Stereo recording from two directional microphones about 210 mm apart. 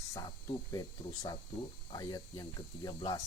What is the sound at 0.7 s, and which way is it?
Speech, 15° left (ahead or behind).